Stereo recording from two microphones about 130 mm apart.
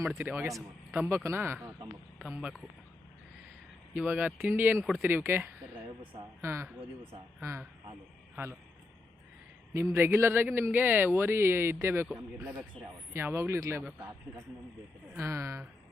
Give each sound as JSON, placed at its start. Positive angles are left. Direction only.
{"t": 0.2, "sound": "speech", "side_deg": -15}
{"t": 3.9, "sound": "speech", "side_deg": -10}
{"t": 9.7, "sound": "speech", "side_deg": -20}
{"t": 12.0, "sound": "speech", "side_deg": -5}
{"t": 13.1, "sound": "speech", "side_deg": -20}
{"t": 15.1, "sound": "speech", "side_deg": -20}